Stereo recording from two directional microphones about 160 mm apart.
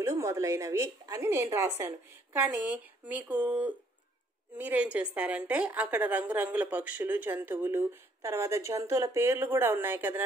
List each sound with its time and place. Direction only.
0.0 s a woman's voice: 20° right (ahead or behind)